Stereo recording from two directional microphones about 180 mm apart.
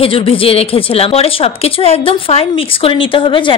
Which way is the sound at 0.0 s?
30° left (ahead or behind).